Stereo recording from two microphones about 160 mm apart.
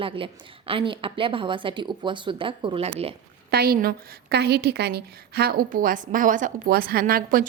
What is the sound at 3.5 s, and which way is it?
A woman's voice, 70° right (ahead or behind).